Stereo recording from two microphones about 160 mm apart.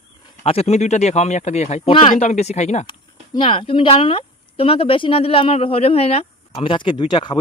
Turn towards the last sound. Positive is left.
turn(degrees=30)  # may be behind; listen again after turning